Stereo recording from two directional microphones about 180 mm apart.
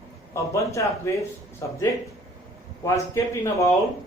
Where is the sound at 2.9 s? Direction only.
15° left (ahead or behind).